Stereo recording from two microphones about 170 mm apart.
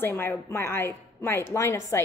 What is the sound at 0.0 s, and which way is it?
A woman's voice, 15° left (ahead or behind).